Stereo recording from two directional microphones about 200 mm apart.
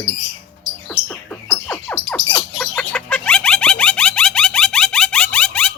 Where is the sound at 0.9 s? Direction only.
5° left (ahead or behind).